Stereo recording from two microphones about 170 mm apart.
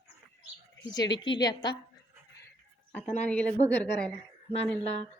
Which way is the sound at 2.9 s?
10° left (ahead or behind).